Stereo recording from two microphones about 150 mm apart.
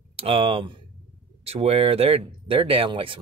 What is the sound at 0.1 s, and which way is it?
Speech, 40° right (ahead or behind).